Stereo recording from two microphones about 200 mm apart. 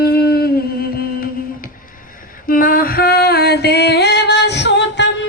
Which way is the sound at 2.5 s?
45° left (ahead or behind).